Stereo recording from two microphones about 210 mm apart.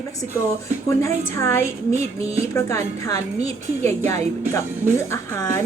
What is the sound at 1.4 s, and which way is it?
A woman's voice, 10° left (ahead or behind).